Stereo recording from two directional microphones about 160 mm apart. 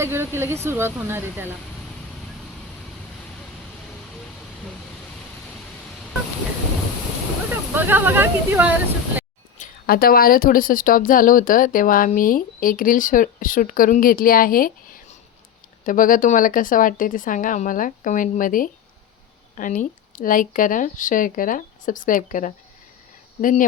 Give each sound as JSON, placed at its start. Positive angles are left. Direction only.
{"t": 0.0, "sound": "speech", "side_deg": -15}
{"t": 7.5, "sound": "speech", "side_deg": -10}
{"t": 9.6, "sound": "a woman's voice", "side_deg": 70}